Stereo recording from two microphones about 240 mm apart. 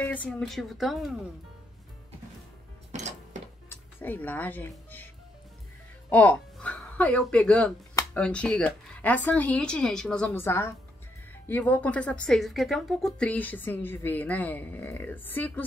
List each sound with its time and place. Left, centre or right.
0.0 s a woman's voice: centre
3.6 s speech: centre
6.0 s speech: centre